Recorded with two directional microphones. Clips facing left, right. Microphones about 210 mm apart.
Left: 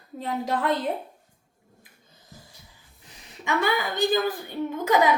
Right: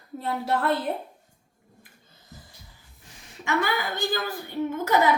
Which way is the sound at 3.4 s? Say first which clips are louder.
Left 1 dB; 20° left (ahead or behind).